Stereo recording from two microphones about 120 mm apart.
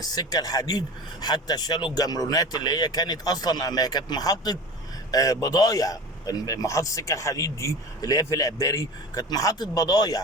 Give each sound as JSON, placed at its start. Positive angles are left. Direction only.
{"t": 0.0, "sound": "a man's voice", "side_deg": 30}